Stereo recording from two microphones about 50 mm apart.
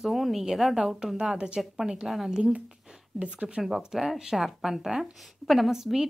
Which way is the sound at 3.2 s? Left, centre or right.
Right.